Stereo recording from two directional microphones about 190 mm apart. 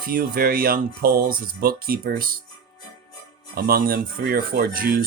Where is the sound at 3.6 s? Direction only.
50° right (ahead or behind).